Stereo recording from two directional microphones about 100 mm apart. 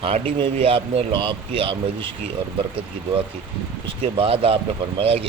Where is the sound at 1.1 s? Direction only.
55° right (ahead or behind).